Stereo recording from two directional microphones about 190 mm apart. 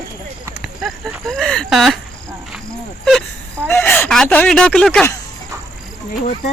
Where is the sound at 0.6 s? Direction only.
Centre (ahead or behind).